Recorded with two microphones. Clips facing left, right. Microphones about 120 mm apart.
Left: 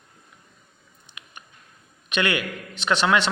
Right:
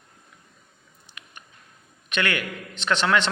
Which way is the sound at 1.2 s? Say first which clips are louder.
Even; 20° left (ahead or behind).